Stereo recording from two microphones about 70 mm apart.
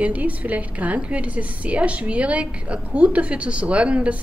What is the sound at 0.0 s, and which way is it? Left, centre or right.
A woman's voice, right.